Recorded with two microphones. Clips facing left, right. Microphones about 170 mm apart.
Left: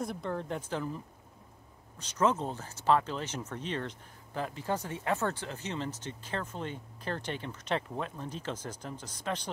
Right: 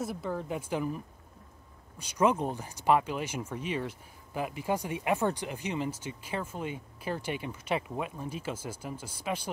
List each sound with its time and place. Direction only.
0.0 s speech: 5° right (ahead or behind)